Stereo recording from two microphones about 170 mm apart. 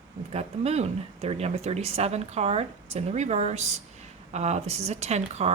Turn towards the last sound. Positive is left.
turn(degrees=-40)  # may be behind; listen again after turning